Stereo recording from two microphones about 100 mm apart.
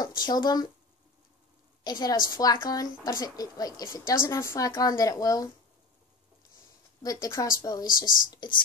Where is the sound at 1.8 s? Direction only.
45° left (ahead or behind).